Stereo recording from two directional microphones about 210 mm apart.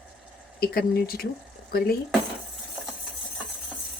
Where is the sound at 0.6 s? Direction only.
45° left (ahead or behind).